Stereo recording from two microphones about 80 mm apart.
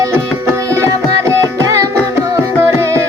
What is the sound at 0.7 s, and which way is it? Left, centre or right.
Music, right.